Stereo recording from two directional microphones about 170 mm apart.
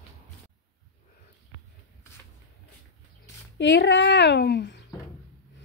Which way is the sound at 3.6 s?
90° left.